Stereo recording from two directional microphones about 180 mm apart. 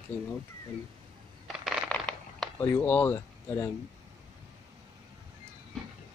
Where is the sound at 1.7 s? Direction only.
5° left (ahead or behind).